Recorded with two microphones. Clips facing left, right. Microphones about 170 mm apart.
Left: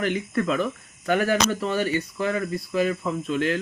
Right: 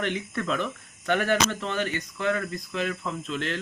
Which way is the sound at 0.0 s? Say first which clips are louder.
Left 5 dB; centre (ahead or behind).